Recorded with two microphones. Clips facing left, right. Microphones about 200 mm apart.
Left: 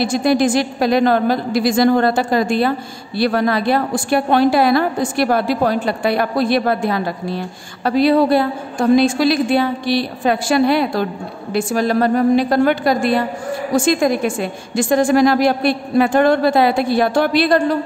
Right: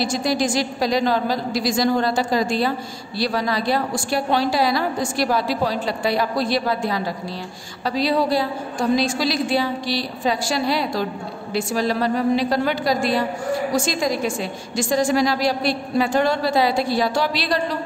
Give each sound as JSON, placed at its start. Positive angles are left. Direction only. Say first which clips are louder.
{"t": 0.0, "sound": "a woman's voice", "louder": "left 6 dB", "side_deg": 55}